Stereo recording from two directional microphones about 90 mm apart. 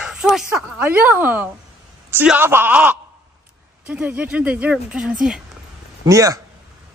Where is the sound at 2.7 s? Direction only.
15° right (ahead or behind).